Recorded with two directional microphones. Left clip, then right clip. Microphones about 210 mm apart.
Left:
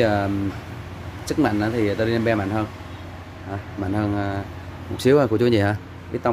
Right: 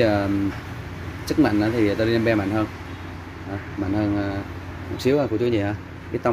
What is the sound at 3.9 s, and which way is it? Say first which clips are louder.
Speech: even; 10° left (ahead or behind).